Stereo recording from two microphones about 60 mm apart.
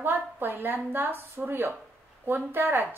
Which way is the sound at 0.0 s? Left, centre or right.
Right.